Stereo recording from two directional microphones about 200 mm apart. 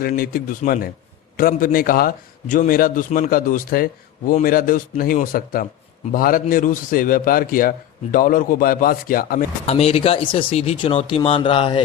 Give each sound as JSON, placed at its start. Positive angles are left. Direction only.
{"t": 0.0, "sound": "a man's voice", "side_deg": 45}
{"t": 9.6, "sound": "speech", "side_deg": 30}